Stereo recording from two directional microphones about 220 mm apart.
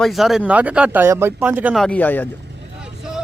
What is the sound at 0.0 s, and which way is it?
Speech, centre (ahead or behind).